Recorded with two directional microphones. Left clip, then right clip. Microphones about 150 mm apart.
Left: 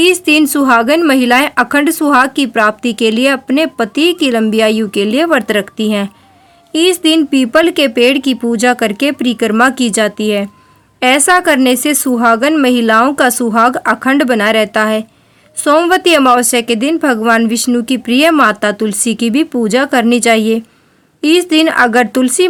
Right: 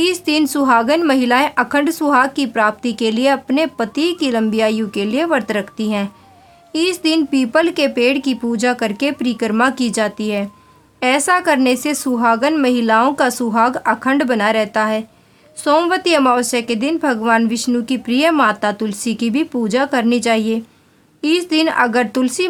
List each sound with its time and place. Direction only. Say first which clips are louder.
0.0 s a woman's voice: left 7 dB; 20° left (ahead or behind)